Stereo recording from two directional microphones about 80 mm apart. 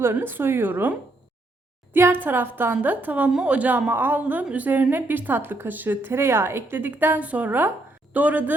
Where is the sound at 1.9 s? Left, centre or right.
Right.